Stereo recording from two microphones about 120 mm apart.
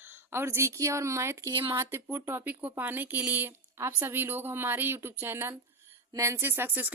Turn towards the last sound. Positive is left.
turn(degrees=-15)  # may be behind; listen again after turning